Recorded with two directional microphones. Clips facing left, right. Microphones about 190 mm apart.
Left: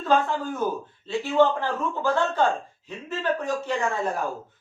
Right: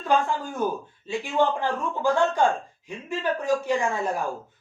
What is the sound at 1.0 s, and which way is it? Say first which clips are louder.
Speech: left 3 dB; 15° right (ahead or behind).